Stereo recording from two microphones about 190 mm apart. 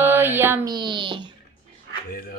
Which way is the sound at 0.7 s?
25° right (ahead or behind).